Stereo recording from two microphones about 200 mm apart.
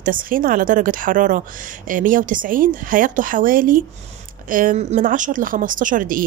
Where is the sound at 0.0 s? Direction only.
45° right (ahead or behind).